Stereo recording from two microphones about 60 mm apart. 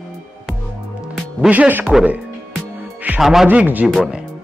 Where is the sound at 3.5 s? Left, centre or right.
Right.